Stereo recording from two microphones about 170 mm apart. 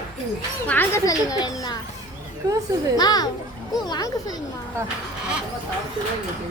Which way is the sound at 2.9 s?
25° left (ahead or behind).